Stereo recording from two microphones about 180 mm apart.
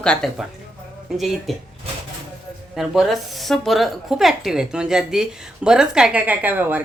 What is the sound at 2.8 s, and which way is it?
Speech, centre (ahead or behind).